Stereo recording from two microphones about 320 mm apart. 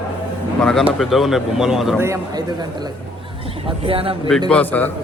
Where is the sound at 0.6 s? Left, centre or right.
Centre.